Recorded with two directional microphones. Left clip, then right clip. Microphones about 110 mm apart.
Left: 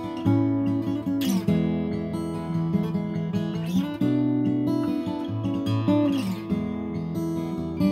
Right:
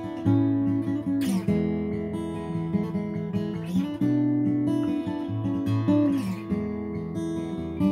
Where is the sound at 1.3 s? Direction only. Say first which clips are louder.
Left 1 dB; 35° left (ahead or behind).